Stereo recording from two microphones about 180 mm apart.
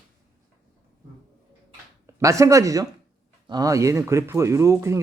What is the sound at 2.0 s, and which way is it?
Speech, 15° right (ahead or behind).